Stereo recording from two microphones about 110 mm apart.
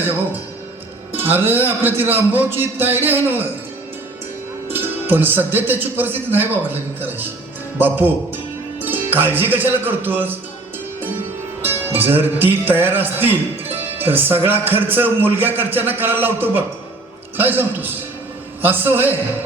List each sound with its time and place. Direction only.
1.1 s a man's voice: 20° right (ahead or behind)
4.7 s speech: 20° right (ahead or behind)
11.6 s a man's voice: 20° right (ahead or behind)